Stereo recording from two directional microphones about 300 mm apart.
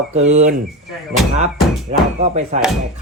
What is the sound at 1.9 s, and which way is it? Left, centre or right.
Speech, right.